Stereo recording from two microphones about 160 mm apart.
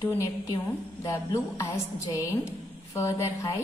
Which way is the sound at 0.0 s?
15° left (ahead or behind).